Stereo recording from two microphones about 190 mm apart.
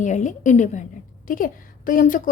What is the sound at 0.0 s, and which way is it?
A woman's voice, 40° left (ahead or behind).